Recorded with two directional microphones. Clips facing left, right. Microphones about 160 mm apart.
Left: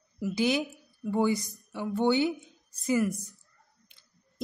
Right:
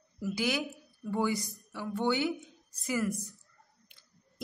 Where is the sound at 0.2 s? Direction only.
20° left (ahead or behind).